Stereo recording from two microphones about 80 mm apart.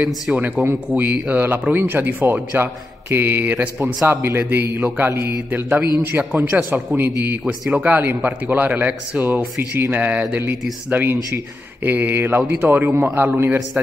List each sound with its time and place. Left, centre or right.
0.0 s a man's voice: centre
7.4 s a man's voice: centre